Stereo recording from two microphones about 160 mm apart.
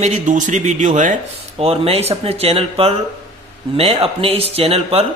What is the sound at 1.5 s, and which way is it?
A man's voice, 35° right (ahead or behind).